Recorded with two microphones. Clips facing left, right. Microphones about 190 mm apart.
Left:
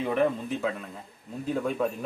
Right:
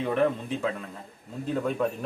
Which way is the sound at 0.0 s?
5° left (ahead or behind).